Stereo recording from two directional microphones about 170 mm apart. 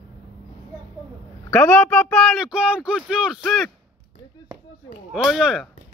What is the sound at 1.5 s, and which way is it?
Speech, 10° left (ahead or behind).